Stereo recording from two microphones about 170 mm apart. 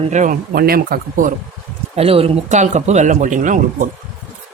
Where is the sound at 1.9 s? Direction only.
35° right (ahead or behind).